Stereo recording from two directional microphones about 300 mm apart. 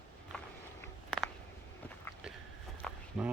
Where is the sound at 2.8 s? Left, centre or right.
Centre.